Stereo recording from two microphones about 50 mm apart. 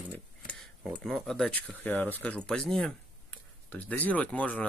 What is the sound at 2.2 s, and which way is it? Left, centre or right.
Speech, left.